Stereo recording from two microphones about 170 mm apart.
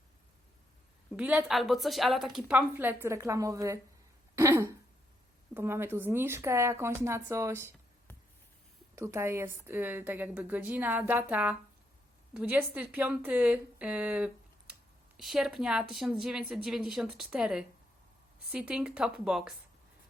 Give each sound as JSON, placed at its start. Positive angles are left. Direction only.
{"t": 1.1, "sound": "a woman's voice", "side_deg": -10}
{"t": 4.4, "sound": "a sound", "side_deg": -15}
{"t": 5.5, "sound": "a woman's voice", "side_deg": -15}
{"t": 9.0, "sound": "a woman's voice", "side_deg": -15}